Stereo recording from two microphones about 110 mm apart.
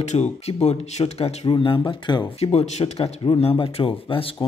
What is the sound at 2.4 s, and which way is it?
Speech, 80° left.